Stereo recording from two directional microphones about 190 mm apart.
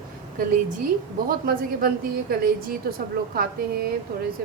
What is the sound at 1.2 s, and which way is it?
A woman's voice, 50° right (ahead or behind).